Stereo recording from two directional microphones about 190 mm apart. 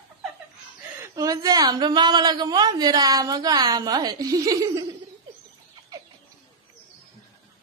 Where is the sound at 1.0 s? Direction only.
20° right (ahead or behind).